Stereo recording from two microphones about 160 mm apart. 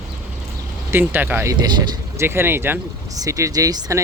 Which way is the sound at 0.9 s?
10° right (ahead or behind).